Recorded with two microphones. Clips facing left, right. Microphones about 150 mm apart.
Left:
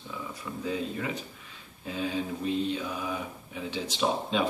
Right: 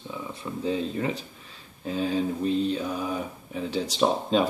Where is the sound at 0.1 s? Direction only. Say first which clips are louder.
Right 3 dB; 25° right (ahead or behind).